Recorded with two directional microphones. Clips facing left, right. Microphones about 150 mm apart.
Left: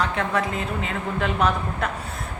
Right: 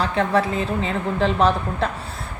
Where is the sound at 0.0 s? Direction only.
30° right (ahead or behind).